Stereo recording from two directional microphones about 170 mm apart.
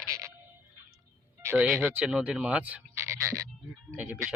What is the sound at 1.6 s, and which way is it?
Speech, centre (ahead or behind).